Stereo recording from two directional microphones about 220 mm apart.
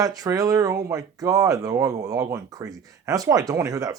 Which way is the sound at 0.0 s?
15° right (ahead or behind).